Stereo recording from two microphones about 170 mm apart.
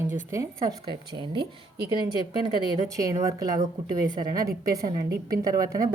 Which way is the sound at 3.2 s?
20° right (ahead or behind).